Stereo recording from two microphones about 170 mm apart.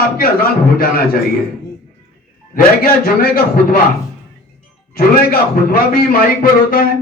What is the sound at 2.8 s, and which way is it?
Speech, 60° left (ahead or behind).